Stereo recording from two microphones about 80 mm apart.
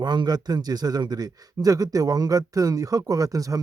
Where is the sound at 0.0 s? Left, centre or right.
Right.